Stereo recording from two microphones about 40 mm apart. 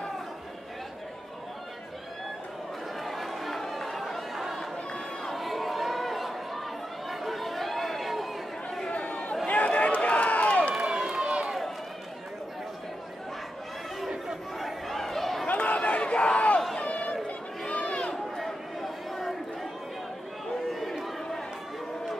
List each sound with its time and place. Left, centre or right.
3.0 s chatter: centre
4.6 s chatter: centre
5.3 s chatter: centre
9.5 s run: left
10.8 s run: centre
14.0 s chatter: centre
14.9 s a sound: centre
15.4 s run: left
16.0 s battle cry: left
16.7 s run: left
17.6 s a sound: left
18.1 s a sound: centre
20.7 s run: centre